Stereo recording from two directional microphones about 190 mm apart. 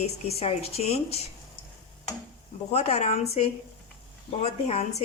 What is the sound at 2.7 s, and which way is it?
A woman's voice, 35° left (ahead or behind).